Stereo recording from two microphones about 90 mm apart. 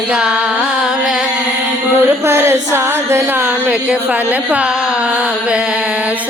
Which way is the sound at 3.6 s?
10° right (ahead or behind).